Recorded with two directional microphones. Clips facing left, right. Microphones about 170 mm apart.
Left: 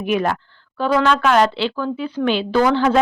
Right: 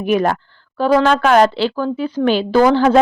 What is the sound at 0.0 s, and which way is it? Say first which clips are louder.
Speech: right 4 dB; 40° right (ahead or behind).